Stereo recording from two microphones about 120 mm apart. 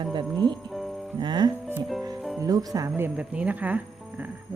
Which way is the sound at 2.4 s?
30° right (ahead or behind).